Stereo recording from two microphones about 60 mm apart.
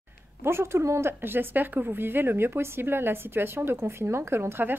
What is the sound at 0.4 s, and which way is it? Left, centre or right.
A woman's voice, right.